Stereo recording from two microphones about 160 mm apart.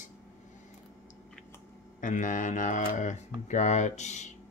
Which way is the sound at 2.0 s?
55° left (ahead or behind).